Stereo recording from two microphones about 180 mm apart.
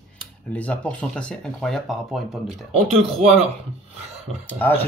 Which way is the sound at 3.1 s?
40° right (ahead or behind).